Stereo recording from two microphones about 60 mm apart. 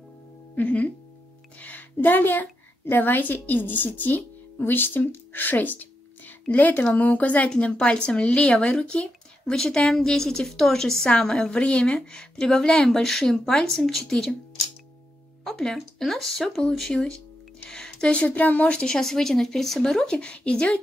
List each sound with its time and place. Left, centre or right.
0.6 s a woman's voice: left; by 14.3 s centre
15.4 s a woman's voice: centre
17.6 s music: centre
18.1 s speech: left
18.9 s a woman's voice: centre